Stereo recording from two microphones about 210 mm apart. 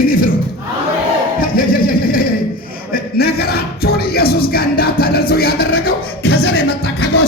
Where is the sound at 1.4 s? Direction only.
45° left (ahead or behind).